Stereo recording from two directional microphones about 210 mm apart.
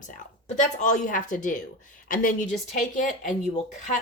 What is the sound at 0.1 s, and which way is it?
A woman's voice, 35° left (ahead or behind).